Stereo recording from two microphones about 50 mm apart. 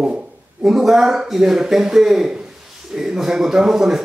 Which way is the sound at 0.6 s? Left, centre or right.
Centre.